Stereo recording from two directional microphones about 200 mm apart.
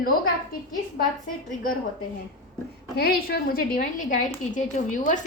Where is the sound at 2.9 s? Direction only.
50° left (ahead or behind).